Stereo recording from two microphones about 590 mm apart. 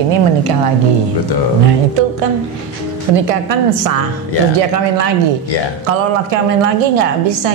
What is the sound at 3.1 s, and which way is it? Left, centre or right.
A woman's voice, right.